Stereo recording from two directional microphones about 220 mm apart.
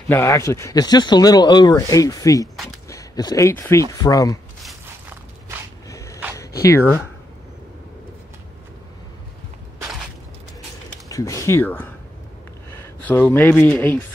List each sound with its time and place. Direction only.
0.1 s speech: 15° left (ahead or behind)
5.9 s a sound: 15° left (ahead or behind)
11.1 s speech: 15° left (ahead or behind)
13.0 s speech: 5° left (ahead or behind)